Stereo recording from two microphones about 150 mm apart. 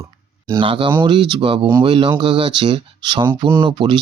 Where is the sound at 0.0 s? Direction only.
20° right (ahead or behind).